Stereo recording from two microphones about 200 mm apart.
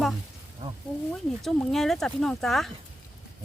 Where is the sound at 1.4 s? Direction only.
Centre (ahead or behind).